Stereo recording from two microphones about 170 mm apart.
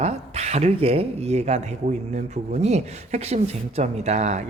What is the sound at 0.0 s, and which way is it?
Speech, 40° right (ahead or behind).